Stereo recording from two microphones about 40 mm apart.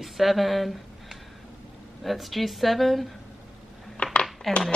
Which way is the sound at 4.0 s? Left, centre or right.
Left.